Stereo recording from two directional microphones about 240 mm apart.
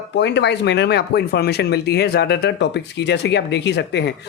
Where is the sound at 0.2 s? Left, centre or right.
Left.